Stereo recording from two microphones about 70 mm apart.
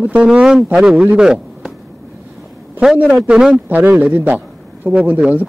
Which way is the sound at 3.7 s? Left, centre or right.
Right.